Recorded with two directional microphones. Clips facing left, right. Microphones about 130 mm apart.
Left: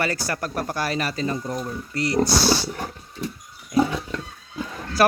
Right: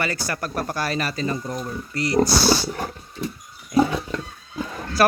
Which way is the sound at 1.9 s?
30° left (ahead or behind).